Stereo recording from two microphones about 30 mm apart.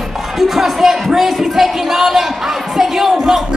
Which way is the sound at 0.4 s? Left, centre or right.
Centre.